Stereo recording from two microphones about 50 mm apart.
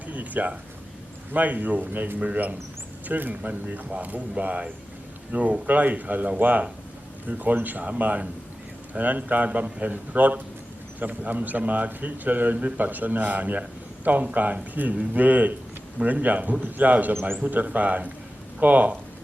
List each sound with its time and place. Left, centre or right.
0.1 s a man's voice: right